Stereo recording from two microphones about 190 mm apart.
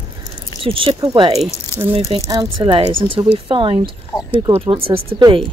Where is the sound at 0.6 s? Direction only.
30° right (ahead or behind).